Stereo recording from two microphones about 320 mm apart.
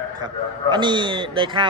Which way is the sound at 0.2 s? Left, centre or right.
Centre.